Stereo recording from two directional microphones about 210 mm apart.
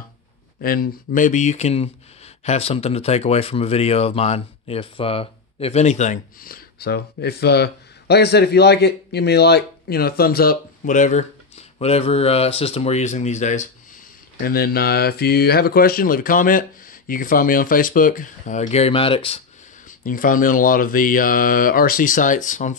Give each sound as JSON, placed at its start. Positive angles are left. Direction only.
{"t": 0.6, "sound": "speech", "side_deg": 45}
{"t": 14.4, "sound": "speech", "side_deg": 45}
{"t": 20.0, "sound": "speech", "side_deg": 40}